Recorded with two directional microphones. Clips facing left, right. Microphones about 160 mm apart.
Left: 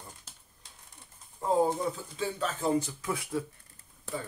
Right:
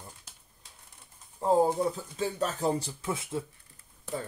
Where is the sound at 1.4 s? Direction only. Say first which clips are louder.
Right 2 dB; 35° right (ahead or behind).